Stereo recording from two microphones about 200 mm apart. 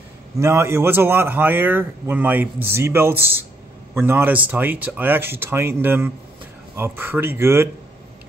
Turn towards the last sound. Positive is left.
turn(degrees=-10)  # may be behind; listen again after turning